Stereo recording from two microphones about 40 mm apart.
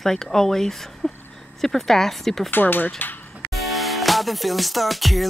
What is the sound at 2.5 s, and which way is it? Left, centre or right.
Speech, left.